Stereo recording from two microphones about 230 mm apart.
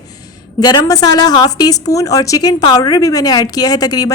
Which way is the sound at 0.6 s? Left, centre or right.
Centre.